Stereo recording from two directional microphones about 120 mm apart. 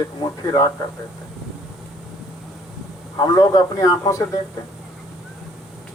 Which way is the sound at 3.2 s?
35° left (ahead or behind).